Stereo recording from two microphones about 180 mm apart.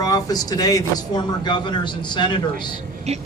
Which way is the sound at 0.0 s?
20° left (ahead or behind).